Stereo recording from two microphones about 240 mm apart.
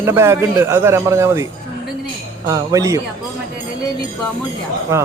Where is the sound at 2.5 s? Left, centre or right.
Centre.